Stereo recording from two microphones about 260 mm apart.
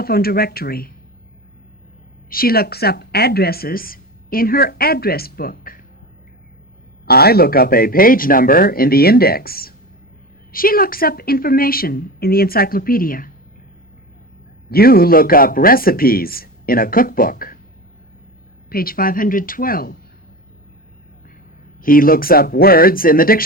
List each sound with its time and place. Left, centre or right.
0.0 s speech: left
2.3 s speech: left
7.0 s speech: left
14.7 s speech: left
18.7 s speech: left
21.8 s speech: left